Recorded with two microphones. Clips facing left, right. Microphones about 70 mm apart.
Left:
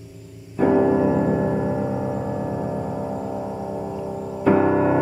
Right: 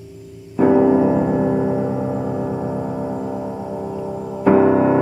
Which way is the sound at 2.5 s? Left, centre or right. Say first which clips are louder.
Right 3 dB; centre.